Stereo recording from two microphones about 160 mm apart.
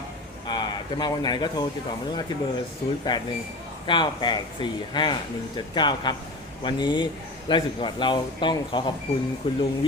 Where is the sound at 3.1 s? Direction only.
30° left (ahead or behind).